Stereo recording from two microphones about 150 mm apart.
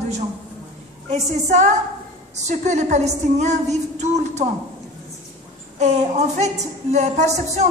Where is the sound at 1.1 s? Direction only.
50° right (ahead or behind).